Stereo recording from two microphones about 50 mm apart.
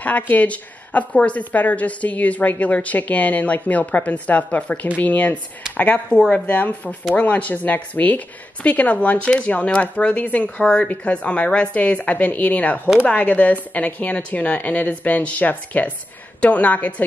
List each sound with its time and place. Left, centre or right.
0.0 s a woman's voice: left